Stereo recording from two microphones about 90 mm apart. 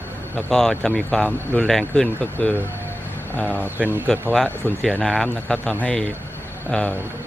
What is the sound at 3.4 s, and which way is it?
Speech, 20° right (ahead or behind).